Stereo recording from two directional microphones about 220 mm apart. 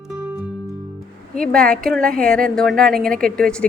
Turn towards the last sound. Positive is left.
turn(degrees=5)  # may be behind; listen again after turning